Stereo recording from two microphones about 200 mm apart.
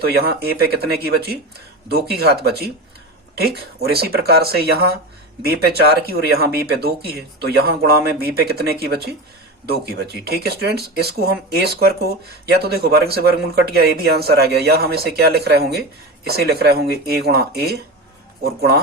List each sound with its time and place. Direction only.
0.1 s speech: 50° right (ahead or behind)
3.8 s speech: 50° right (ahead or behind)